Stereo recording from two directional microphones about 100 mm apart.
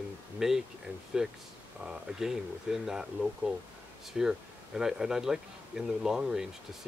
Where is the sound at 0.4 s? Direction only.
5° right (ahead or behind).